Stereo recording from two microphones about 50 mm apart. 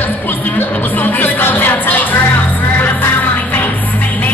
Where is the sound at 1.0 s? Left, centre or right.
Left.